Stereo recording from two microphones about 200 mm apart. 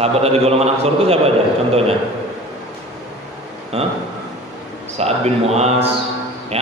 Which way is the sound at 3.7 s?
30° right (ahead or behind).